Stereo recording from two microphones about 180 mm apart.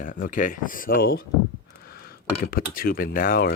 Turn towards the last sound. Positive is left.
turn(degrees=55)  # may be behind; listen again after turning